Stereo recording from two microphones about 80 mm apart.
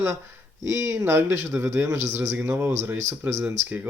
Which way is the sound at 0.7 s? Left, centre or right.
Right.